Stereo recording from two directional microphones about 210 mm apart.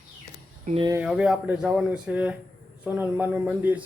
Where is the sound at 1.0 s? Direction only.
5° right (ahead or behind).